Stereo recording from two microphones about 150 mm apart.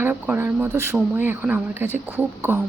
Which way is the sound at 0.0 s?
15° right (ahead or behind).